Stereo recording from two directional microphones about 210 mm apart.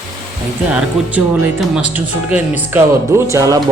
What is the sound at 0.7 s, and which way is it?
Speech, 5° right (ahead or behind).